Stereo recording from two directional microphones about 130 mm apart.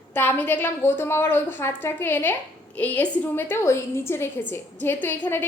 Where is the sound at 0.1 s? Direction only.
15° left (ahead or behind).